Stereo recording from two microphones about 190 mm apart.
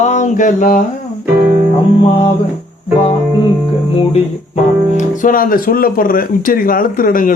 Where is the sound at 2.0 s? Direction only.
30° left (ahead or behind).